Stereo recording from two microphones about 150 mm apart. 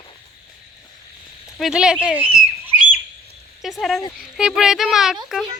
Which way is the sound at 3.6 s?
Centre (ahead or behind).